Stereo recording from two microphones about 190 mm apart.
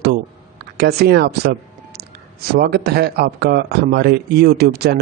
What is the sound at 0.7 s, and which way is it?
A man's voice, 60° right (ahead or behind).